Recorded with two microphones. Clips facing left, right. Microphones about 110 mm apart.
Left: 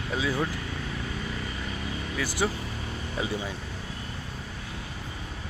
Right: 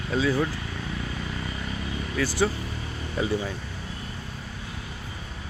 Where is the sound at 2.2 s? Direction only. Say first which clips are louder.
Right 4 dB; 15° left (ahead or behind).